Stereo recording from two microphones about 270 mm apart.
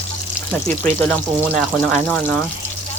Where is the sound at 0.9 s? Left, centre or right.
Centre.